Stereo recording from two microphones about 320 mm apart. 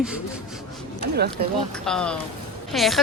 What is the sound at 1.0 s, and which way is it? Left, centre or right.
Speech, right.